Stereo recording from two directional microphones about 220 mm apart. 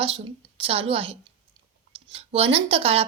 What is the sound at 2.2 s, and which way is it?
Speech, 25° right (ahead or behind).